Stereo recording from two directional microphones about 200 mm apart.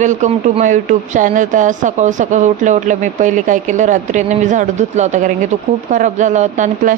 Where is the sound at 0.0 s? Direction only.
40° right (ahead or behind).